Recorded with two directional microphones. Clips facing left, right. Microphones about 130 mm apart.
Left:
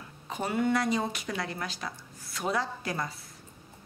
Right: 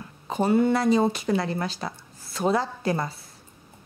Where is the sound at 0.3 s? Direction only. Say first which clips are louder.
Right 7 dB; 30° right (ahead or behind).